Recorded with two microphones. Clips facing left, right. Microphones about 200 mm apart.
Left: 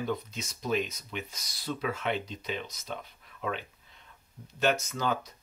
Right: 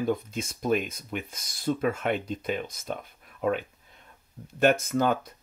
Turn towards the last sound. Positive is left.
turn(degrees=-55)  # may be behind; listen again after turning